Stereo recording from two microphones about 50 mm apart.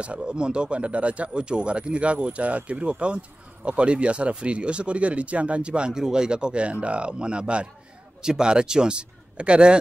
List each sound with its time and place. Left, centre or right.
0.0 s speech: right